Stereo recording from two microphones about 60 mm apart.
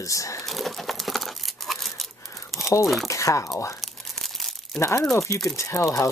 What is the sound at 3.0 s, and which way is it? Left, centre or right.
Speech, left.